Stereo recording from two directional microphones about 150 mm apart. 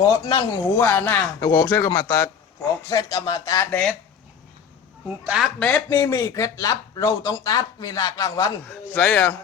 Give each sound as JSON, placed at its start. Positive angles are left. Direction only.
{"t": 0.0, "sound": "speech", "side_deg": 20}
{"t": 0.8, "sound": "speech", "side_deg": 10}
{"t": 5.2, "sound": "speech", "side_deg": -10}
{"t": 6.0, "sound": "speech", "side_deg": 20}
{"t": 8.9, "sound": "speech", "side_deg": 10}